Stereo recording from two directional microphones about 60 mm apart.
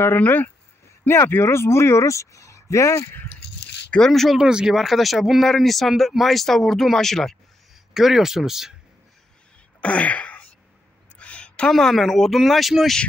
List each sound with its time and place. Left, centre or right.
0.2 s speech: left
1.0 s speech: left
4.1 s speech: centre
4.4 s speech: centre
4.7 s speech: centre
7.9 s speech: centre
9.8 s wail: left
11.1 s a sound: centre
11.7 s speech: centre